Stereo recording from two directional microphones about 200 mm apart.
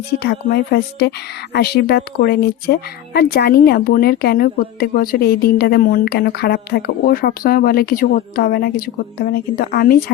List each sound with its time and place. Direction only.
0.1 s speech: 55° left (ahead or behind)